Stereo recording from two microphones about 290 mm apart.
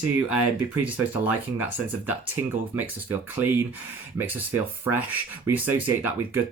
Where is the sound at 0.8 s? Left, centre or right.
Centre.